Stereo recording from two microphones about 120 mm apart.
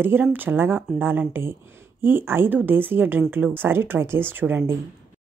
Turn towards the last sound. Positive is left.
turn(degrees=-15)  # may be behind; listen again after turning